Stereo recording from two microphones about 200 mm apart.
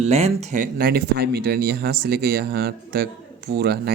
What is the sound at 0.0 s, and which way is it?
Speech, 35° right (ahead or behind).